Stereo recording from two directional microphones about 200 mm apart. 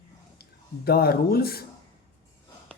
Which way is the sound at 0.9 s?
50° left (ahead or behind).